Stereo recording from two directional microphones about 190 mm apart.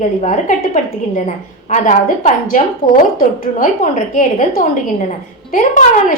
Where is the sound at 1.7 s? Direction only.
40° left (ahead or behind).